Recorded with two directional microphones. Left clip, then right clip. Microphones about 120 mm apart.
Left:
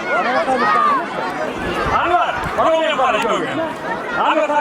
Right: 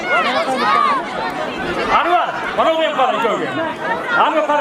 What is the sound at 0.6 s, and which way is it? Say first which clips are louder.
Speech: right 1 dB; 45° right (ahead or behind).